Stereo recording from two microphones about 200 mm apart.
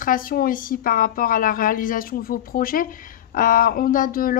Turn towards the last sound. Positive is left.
turn(degrees=45)  # may be behind; listen again after turning